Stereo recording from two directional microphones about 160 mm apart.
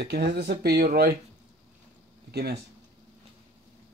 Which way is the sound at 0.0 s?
85° right.